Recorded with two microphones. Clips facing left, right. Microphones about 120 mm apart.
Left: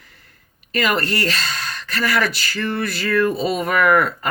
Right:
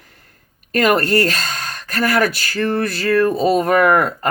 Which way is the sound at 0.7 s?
50° right (ahead or behind).